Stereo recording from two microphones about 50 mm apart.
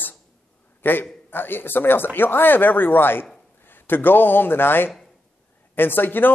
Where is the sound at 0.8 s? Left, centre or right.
Left.